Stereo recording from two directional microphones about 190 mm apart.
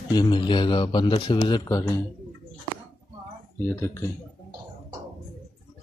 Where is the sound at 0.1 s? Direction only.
20° left (ahead or behind).